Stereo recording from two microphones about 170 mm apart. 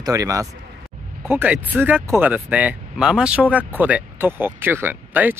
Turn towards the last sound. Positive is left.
turn(degrees=-10)  # may be behind; listen again after turning